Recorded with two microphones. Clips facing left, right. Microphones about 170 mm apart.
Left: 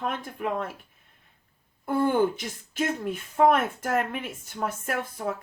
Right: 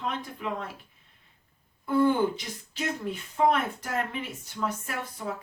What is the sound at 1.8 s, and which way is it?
Speech, 50° left (ahead or behind).